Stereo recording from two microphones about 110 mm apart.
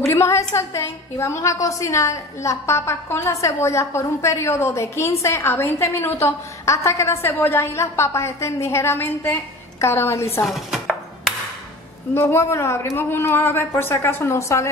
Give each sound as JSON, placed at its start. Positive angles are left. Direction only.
{"t": 0.0, "sound": "a woman's voice", "side_deg": 25}
{"t": 10.4, "sound": "chopping", "side_deg": 0}
{"t": 12.1, "sound": "a woman's voice", "side_deg": 20}